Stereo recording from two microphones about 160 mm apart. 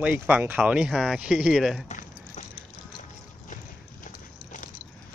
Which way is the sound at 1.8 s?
50° left (ahead or behind).